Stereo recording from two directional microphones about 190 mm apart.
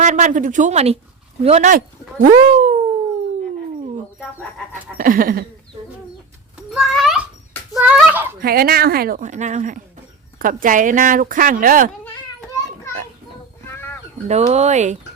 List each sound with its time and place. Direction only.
0.0 s speech: 40° right (ahead or behind)
2.2 s cat: 40° right (ahead or behind)
4.9 s speech: 50° right (ahead or behind)
6.6 s a sound: centre (ahead or behind)
8.4 s speech: 50° right (ahead or behind)
13.7 s sheep: 10° left (ahead or behind)
14.3 s speech: 35° right (ahead or behind)